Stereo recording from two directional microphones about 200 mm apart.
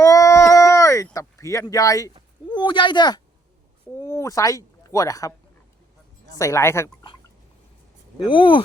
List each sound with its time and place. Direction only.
0.0 s a sound: 15° left (ahead or behind)
2.5 s speech: 25° left (ahead or behind)
6.4 s speech: 15° left (ahead or behind)
8.3 s speech: 25° left (ahead or behind)